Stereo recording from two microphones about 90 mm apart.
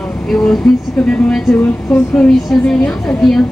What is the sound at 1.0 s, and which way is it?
Speech, 15° left (ahead or behind).